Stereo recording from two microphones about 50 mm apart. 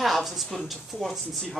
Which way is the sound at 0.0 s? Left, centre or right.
Centre.